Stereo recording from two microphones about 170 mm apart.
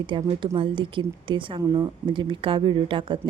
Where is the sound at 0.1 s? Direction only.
30° right (ahead or behind).